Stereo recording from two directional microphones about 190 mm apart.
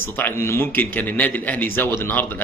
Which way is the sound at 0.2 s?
10° left (ahead or behind).